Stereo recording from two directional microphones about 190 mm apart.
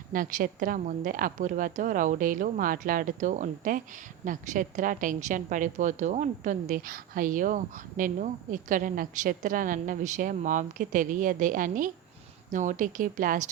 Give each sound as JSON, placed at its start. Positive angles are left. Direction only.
{"t": 0.1, "sound": "a woman's voice", "side_deg": -45}